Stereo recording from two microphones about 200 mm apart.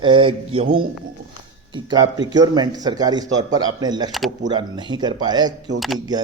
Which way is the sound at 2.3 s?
20° right (ahead or behind).